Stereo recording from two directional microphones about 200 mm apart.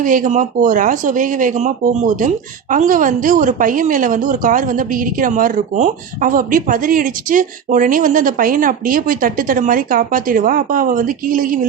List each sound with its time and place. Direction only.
0.0 s speech: 40° right (ahead or behind)